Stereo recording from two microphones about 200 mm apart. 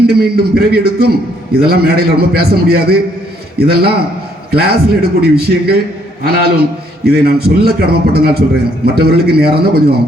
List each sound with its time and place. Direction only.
0.1 s a man's voice: 50° right (ahead or behind)